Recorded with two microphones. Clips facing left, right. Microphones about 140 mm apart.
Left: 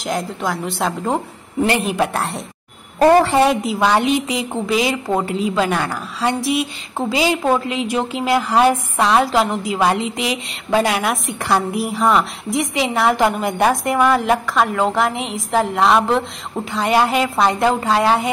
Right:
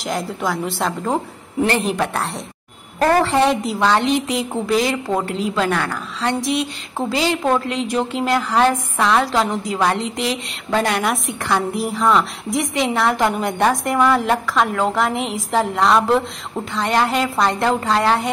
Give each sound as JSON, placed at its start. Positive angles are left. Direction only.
{"t": 0.0, "sound": "a woman's voice", "side_deg": 0}
{"t": 3.0, "sound": "a woman's voice", "side_deg": 20}
{"t": 3.3, "sound": "a woman's voice", "side_deg": 0}